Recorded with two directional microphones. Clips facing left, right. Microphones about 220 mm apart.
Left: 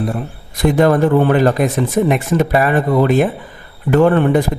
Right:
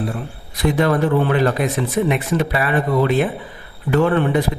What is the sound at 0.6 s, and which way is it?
Speech, 45° left (ahead or behind).